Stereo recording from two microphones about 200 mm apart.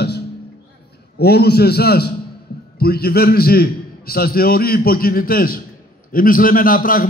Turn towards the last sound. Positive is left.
turn(degrees=45)  # may be behind; listen again after turning